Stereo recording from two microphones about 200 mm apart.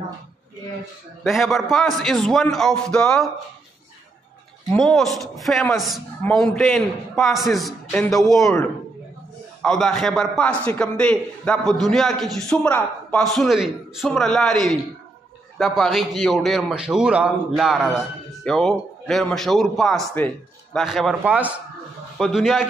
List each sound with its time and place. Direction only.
1.2 s a man's voice: centre (ahead or behind)
4.6 s a man's voice: centre (ahead or behind)
9.6 s a man's voice: 5° left (ahead or behind)